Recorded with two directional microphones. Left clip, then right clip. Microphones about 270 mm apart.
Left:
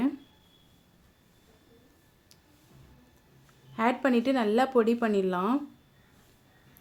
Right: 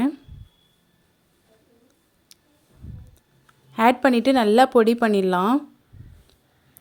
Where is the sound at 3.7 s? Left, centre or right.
Right.